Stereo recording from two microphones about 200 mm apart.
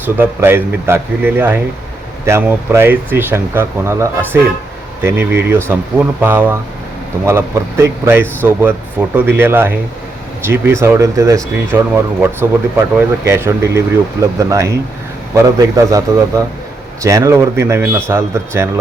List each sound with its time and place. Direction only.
0.0 s speech: 10° right (ahead or behind)